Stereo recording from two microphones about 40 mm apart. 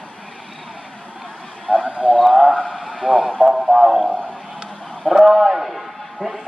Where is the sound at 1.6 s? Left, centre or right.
Centre.